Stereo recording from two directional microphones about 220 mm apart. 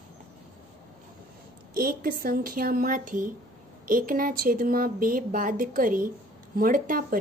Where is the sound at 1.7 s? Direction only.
40° right (ahead or behind).